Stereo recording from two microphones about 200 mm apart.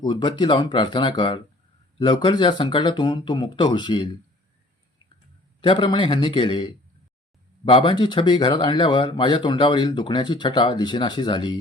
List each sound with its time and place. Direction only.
0.0 s speech: 20° left (ahead or behind)
5.5 s speech: 25° left (ahead or behind)